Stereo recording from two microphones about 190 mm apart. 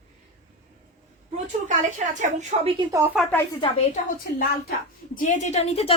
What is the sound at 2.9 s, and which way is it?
Speech, 10° right (ahead or behind).